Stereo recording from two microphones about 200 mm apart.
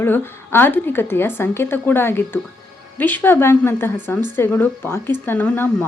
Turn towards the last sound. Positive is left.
turn(degrees=5)  # may be behind; listen again after turning